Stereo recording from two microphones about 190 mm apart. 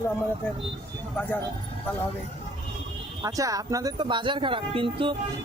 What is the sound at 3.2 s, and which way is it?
Speech, 20° right (ahead or behind).